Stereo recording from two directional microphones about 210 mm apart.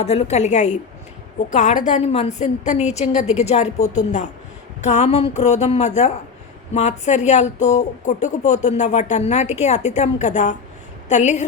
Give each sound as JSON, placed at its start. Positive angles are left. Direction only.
{"t": 0.0, "sound": "speech", "side_deg": 30}